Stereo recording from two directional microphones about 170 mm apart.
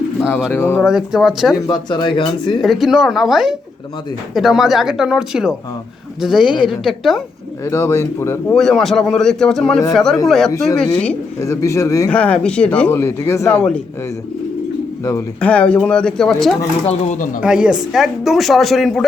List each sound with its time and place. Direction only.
0.5 s speech: 15° left (ahead or behind)
0.8 s speech: 5° right (ahead or behind)
1.5 s speech: 25° left (ahead or behind)
2.6 s speech: centre (ahead or behind)
7.6 s speech: 15° left (ahead or behind)
8.5 s speech: centre (ahead or behind)
11.3 s speech: 15° left (ahead or behind)
13.6 s speech: 5° left (ahead or behind)
15.4 s speech: 5° left (ahead or behind)
16.8 s speech: 45° left (ahead or behind)
17.4 s speech: 5° right (ahead or behind)